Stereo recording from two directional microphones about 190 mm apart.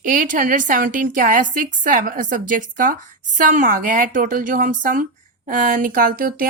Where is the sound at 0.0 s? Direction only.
45° right (ahead or behind).